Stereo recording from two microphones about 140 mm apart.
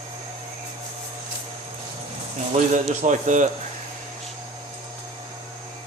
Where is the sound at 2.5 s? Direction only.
60° right (ahead or behind).